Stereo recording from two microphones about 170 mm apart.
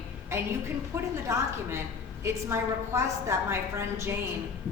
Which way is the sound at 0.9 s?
15° right (ahead or behind).